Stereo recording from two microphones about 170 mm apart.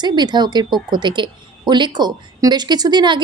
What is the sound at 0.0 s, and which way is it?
Speech, 25° right (ahead or behind).